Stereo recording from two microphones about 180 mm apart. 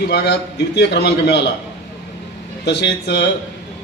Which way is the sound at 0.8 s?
65° left (ahead or behind).